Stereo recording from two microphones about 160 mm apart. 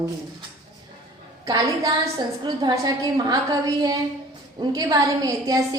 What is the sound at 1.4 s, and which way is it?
A woman's voice, 20° right (ahead or behind).